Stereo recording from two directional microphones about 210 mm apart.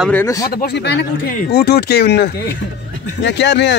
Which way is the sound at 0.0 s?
10° left (ahead or behind).